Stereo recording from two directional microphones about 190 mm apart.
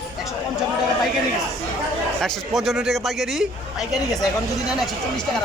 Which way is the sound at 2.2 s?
Centre (ahead or behind).